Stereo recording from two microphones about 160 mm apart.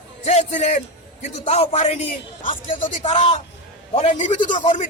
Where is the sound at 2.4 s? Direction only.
55° left (ahead or behind).